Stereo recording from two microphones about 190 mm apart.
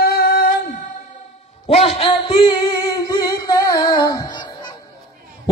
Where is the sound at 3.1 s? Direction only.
20° left (ahead or behind).